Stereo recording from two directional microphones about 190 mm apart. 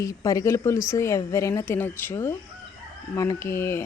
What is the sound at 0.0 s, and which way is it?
A woman's voice, 15° left (ahead or behind).